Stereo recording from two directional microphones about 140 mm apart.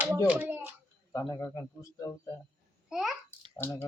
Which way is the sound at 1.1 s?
20° left (ahead or behind).